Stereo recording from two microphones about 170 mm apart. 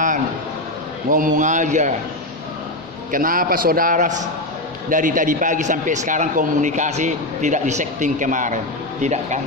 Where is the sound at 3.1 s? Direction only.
55° right (ahead or behind).